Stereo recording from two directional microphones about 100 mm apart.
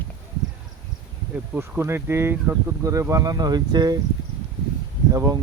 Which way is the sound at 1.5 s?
25° right (ahead or behind).